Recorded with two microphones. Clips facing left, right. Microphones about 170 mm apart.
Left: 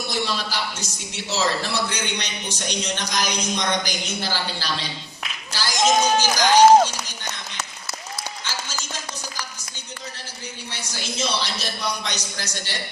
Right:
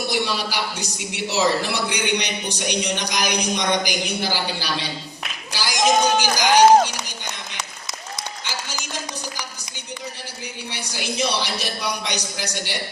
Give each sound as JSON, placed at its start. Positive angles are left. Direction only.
{"t": 0.1, "sound": "a man's voice", "side_deg": -15}
{"t": 8.4, "sound": "a sound", "side_deg": -15}
{"t": 10.7, "sound": "a man's voice", "side_deg": -15}